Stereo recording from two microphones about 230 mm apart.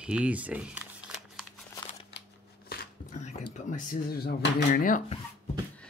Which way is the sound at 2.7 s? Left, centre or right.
Left.